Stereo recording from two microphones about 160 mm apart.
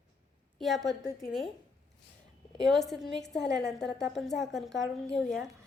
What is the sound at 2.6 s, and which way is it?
A woman's voice, centre (ahead or behind).